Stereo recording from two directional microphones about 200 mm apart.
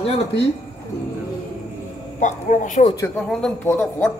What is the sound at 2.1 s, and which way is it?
Speech, 40° left (ahead or behind).